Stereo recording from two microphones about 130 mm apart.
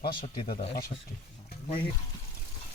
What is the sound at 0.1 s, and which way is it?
Speech, 85° left.